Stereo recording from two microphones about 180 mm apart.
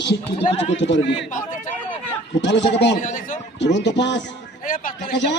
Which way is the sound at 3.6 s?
75° left (ahead or behind).